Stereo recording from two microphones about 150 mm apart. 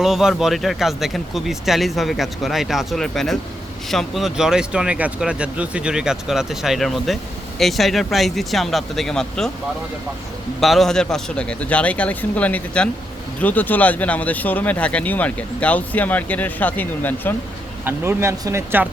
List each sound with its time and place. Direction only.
0.0 s speech: 5° right (ahead or behind)
10.6 s speech: centre (ahead or behind)
17.8 s speech: 15° right (ahead or behind)